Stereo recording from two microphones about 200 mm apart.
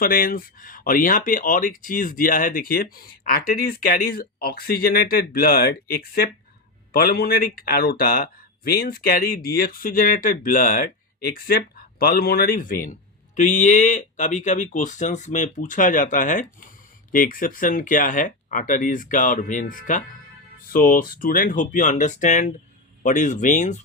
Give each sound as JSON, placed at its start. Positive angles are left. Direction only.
{"t": 0.0, "sound": "speech", "side_deg": 45}